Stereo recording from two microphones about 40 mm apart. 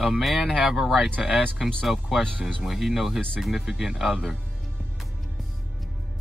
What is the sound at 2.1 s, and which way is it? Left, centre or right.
Speech, centre.